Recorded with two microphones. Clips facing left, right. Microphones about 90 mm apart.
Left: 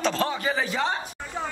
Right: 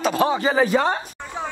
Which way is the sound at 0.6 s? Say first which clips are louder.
Right 10 dB; 50° right (ahead or behind).